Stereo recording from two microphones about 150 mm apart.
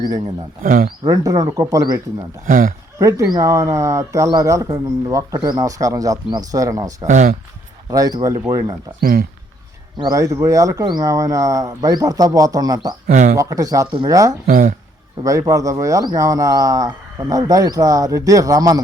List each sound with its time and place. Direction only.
0.6 s speech: 65° right (ahead or behind)
1.0 s a man's voice: 25° right (ahead or behind)
2.5 s speech: 60° right (ahead or behind)
3.0 s a man's voice: 20° right (ahead or behind)
9.0 s speech: 80° right
10.0 s a man's voice: 25° right (ahead or behind)
13.1 s speech: 60° right (ahead or behind)
13.3 s a man's voice: 20° right (ahead or behind)
14.4 s speech: 65° right (ahead or behind)
15.2 s a man's voice: 20° right (ahead or behind)